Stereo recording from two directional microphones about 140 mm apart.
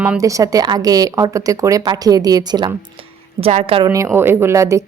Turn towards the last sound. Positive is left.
turn(degrees=-20)  # may be behind; listen again after turning